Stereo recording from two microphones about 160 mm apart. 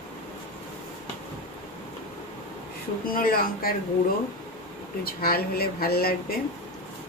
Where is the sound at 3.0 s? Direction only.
65° left (ahead or behind).